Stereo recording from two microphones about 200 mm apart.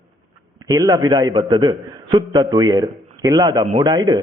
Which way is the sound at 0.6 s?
15° right (ahead or behind).